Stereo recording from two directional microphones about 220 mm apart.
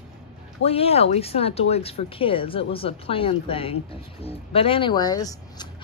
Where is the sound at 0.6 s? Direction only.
25° left (ahead or behind).